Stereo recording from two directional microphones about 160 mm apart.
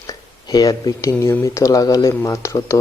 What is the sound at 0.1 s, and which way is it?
Speech, 25° left (ahead or behind).